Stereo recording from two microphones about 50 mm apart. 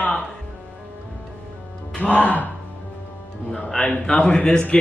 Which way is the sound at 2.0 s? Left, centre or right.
Left.